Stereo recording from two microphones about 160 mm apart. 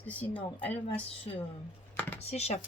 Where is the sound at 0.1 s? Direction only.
10° left (ahead or behind).